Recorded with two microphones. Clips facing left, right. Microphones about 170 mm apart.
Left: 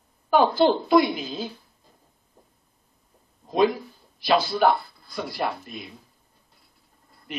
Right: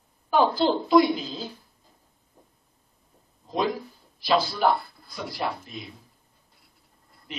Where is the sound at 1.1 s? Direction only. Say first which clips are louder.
Left 2 dB; 65° left (ahead or behind).